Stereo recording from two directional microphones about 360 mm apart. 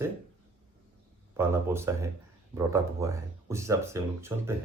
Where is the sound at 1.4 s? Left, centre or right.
Centre.